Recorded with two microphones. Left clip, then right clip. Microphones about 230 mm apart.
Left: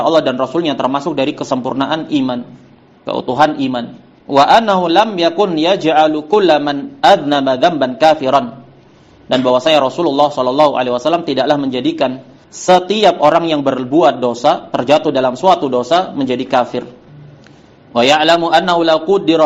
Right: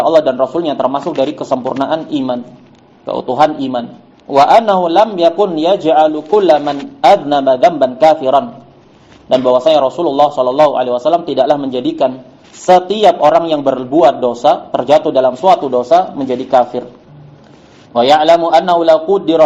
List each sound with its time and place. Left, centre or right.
0.0 s a man's voice: left
17.9 s a man's voice: left